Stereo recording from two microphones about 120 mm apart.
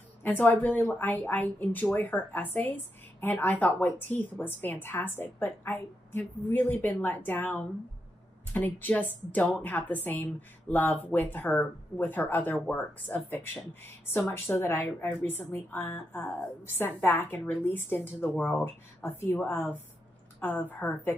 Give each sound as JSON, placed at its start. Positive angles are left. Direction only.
{"t": 0.2, "sound": "speech", "side_deg": 15}